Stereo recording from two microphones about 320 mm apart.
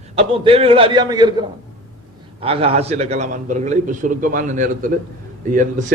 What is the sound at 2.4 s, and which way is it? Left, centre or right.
A man's voice, centre.